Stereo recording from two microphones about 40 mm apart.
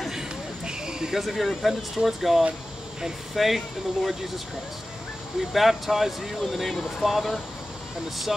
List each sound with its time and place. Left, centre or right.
0.7 s a sound: centre
1.2 s speech: centre
5.4 s speech: centre